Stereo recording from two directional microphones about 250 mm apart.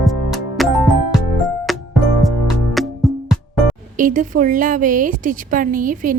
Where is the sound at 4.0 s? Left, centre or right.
Right.